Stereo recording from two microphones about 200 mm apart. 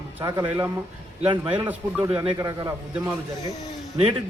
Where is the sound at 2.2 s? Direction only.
20° right (ahead or behind).